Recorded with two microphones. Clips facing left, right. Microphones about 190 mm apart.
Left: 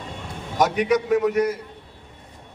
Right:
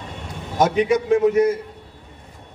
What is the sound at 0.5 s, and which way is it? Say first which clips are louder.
A man's voice: right 2 dB; 25° right (ahead or behind).